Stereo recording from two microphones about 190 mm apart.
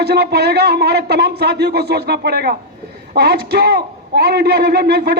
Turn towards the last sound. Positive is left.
turn(degrees=-55)  # may be behind; listen again after turning